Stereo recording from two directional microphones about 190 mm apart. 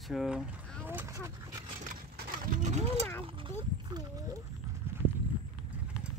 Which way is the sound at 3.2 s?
25° right (ahead or behind).